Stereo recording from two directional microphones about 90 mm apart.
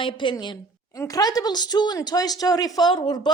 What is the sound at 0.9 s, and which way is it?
A woman's voice, 40° left (ahead or behind).